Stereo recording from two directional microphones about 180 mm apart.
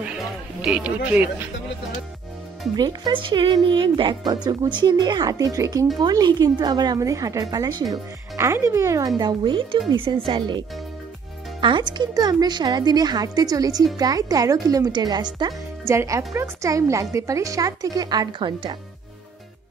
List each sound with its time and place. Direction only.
0.6 s speech: 5° right (ahead or behind)
2.7 s speech: 25° right (ahead or behind)
11.6 s speech: 25° right (ahead or behind)